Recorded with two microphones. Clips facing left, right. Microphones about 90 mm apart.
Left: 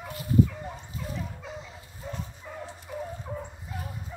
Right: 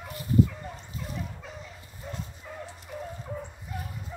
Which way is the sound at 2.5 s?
10° left (ahead or behind).